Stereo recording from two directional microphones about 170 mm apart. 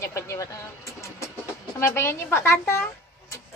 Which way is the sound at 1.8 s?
15° left (ahead or behind).